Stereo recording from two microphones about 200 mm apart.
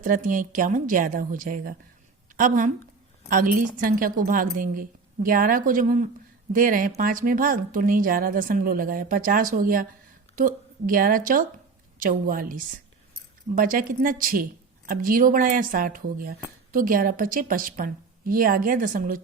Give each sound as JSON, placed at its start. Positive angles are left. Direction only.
{"t": 0.0, "sound": "a woman's voice", "side_deg": -40}